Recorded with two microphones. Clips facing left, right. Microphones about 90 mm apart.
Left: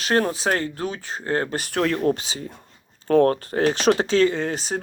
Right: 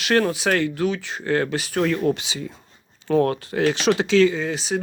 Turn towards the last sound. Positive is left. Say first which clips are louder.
# right 1 dB
turn(degrees=40)  # may be behind; listen again after turning